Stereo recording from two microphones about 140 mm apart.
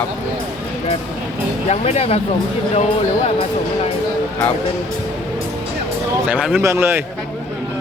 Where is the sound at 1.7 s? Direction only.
50° left (ahead or behind).